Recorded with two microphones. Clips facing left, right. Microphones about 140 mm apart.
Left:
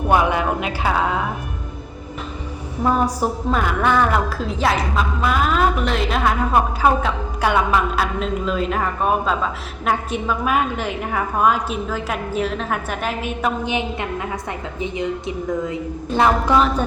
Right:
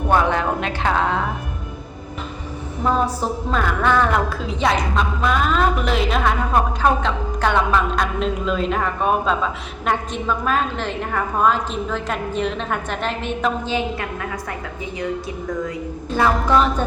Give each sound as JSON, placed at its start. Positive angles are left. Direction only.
{"t": 0.1, "sound": "a sound", "side_deg": 10}
{"t": 2.8, "sound": "a woman's voice", "side_deg": 10}
{"t": 13.7, "sound": "a woman's voice", "side_deg": 20}